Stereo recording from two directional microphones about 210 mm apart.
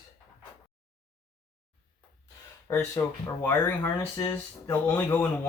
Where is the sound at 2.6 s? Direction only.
15° left (ahead or behind).